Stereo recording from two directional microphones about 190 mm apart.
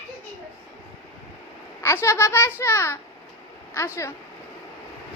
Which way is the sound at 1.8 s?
15° left (ahead or behind).